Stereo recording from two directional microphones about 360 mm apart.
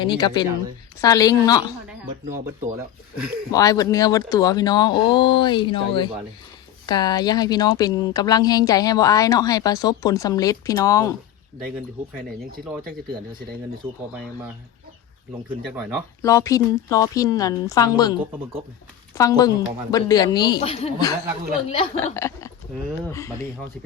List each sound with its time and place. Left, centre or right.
0.0 s speech: centre
2.3 s speech: right
2.7 s speech: centre
3.5 s speech: centre
12.5 s speech: right
15.4 s speech: centre
16.2 s speech: centre